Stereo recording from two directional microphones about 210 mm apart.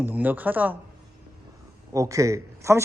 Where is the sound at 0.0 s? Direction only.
10° right (ahead or behind).